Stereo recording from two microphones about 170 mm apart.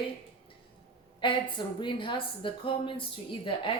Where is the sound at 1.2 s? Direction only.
30° left (ahead or behind).